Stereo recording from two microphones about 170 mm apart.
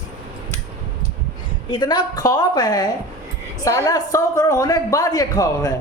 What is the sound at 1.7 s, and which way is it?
Speech, 25° left (ahead or behind).